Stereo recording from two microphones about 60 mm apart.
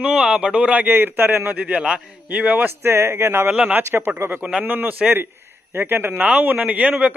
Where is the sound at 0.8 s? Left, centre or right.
Right.